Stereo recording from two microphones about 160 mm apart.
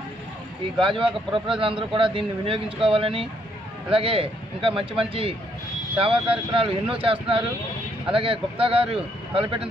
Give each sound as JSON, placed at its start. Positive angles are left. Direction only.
{"t": 0.7, "sound": "speech", "side_deg": -30}